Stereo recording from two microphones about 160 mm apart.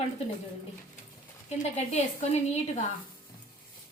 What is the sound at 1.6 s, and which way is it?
Speech, 45° left (ahead or behind).